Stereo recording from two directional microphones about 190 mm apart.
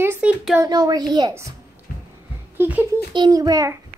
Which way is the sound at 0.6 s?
20° right (ahead or behind).